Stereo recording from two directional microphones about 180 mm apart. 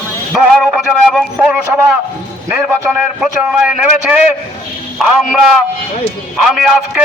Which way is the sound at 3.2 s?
5° right (ahead or behind).